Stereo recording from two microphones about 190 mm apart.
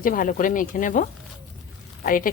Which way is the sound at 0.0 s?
45° left (ahead or behind).